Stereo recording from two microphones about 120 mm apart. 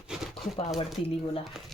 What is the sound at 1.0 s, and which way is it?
Speech, 55° left (ahead or behind).